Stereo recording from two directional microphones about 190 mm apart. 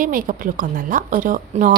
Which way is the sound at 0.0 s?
45° right (ahead or behind).